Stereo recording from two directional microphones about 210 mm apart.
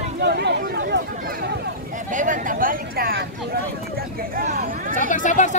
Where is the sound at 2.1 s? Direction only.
40° right (ahead or behind).